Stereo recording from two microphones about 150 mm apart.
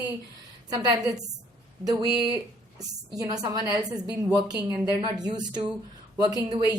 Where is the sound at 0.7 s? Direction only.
25° right (ahead or behind).